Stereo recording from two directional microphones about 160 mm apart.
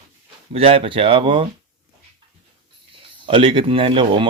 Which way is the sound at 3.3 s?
35° right (ahead or behind).